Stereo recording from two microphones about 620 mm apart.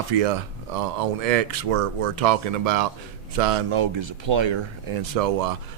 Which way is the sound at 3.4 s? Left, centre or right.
Right.